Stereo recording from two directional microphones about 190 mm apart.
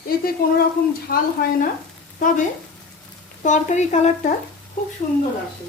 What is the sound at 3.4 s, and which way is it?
Speech, 40° left (ahead or behind).